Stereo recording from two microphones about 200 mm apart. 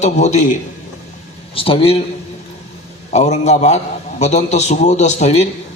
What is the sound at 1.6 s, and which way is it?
Speech, 30° left (ahead or behind).